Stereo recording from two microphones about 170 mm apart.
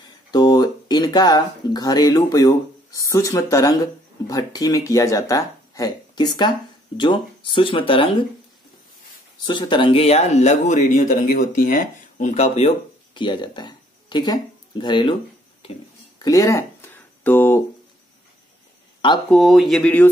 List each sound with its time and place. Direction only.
0.3 s speech: 25° left (ahead or behind)
9.4 s speech: 25° left (ahead or behind)
13.1 s speech: 25° left (ahead or behind)
16.2 s a sound: 20° left (ahead or behind)
18.9 s speech: 30° left (ahead or behind)
19.3 s speech: centre (ahead or behind)